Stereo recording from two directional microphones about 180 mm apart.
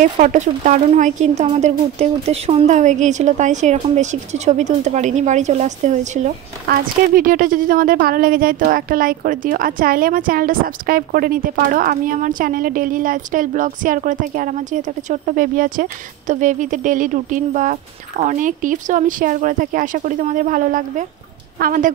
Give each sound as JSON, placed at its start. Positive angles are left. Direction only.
{"t": 0.0, "sound": "a woman's voice", "side_deg": -45}
{"t": 6.7, "sound": "speech", "side_deg": -50}